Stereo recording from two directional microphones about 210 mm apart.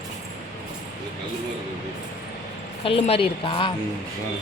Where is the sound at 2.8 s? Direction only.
25° left (ahead or behind).